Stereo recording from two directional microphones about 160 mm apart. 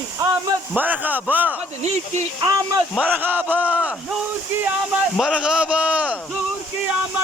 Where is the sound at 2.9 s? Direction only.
10° right (ahead or behind).